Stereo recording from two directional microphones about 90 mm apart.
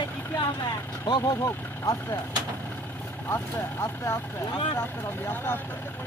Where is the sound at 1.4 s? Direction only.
40° left (ahead or behind).